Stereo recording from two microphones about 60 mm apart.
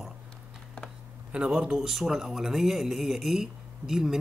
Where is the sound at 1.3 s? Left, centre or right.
Centre.